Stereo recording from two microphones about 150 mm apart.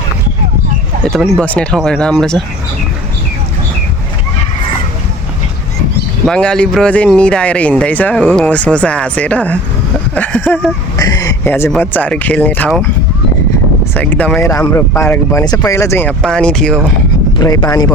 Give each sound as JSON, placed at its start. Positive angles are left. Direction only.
{"t": 1.1, "sound": "speech", "side_deg": 5}
{"t": 6.2, "sound": "speech", "side_deg": 5}
{"t": 10.9, "sound": "a sound", "side_deg": 25}
{"t": 11.7, "sound": "speech", "side_deg": 10}
{"t": 13.9, "sound": "speech", "side_deg": 10}
{"t": 14.4, "sound": "speech", "side_deg": 20}
{"t": 16.2, "sound": "speech", "side_deg": 5}
{"t": 17.3, "sound": "speech", "side_deg": 25}